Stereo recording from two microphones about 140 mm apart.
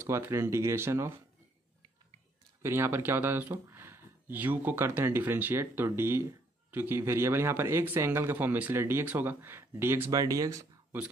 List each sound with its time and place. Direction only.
0.0 s speech: 20° right (ahead or behind)
2.6 s speech: 20° right (ahead or behind)